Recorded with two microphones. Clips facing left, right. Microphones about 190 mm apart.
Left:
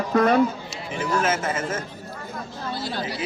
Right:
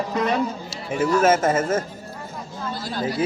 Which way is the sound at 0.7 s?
45° right (ahead or behind).